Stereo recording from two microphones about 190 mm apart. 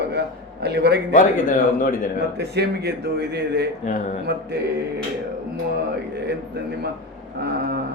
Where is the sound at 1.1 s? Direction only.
45° left (ahead or behind).